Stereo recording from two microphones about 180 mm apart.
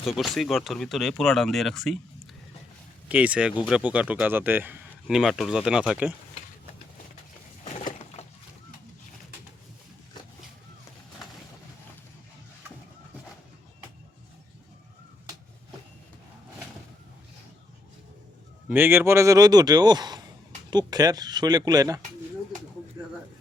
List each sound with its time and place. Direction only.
0.0 s speech: centre (ahead or behind)
3.1 s speech: 10° right (ahead or behind)
7.6 s a sound: 40° left (ahead or behind)
18.7 s speech: 10° right (ahead or behind)